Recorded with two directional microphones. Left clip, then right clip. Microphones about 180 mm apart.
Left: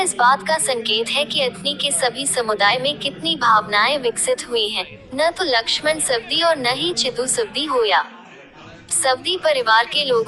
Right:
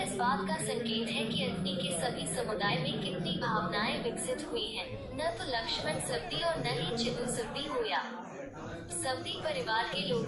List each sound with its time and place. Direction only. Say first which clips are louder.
0.2 s a woman's voice: left 17 dB; 60° left (ahead or behind)